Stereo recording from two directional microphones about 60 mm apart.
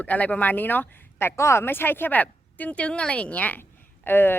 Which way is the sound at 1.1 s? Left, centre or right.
Left.